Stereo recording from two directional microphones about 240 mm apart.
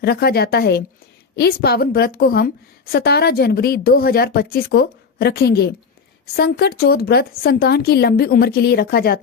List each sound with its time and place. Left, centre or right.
0.0 s a woman's voice: left